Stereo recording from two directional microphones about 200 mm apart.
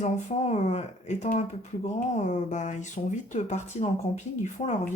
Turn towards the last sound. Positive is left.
turn(degrees=35)  # may be behind; listen again after turning